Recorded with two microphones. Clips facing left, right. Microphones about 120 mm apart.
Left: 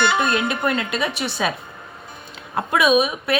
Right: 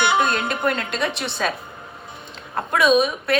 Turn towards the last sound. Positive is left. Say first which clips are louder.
# even
turn(degrees=5)  # may be behind; listen again after turning